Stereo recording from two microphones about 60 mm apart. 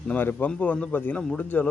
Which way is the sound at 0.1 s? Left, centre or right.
Left.